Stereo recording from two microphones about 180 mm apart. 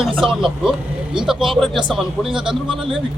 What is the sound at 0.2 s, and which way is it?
Speech, centre (ahead or behind).